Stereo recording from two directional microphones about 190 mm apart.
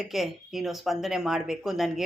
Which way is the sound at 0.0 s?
Centre (ahead or behind).